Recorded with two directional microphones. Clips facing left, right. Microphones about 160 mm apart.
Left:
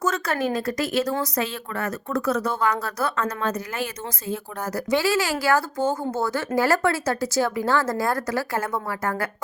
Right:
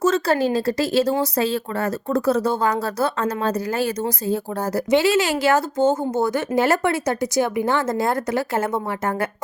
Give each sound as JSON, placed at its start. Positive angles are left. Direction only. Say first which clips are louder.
{"t": 0.0, "sound": "speech", "louder": "right 6 dB", "side_deg": -30}